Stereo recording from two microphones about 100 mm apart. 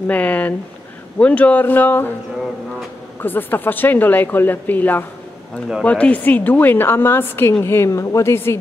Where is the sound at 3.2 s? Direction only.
20° left (ahead or behind).